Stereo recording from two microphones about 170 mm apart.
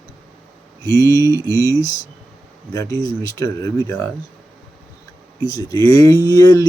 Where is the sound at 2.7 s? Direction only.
20° left (ahead or behind).